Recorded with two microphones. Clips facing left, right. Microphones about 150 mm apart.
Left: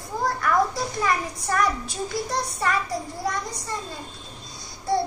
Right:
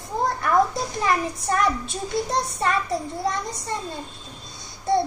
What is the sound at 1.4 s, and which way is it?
A child's voice, 25° right (ahead or behind).